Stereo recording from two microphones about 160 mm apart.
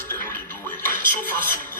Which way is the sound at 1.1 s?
10° left (ahead or behind).